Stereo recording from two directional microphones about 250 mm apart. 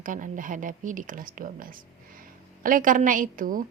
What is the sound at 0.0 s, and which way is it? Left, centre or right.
A woman's voice, right.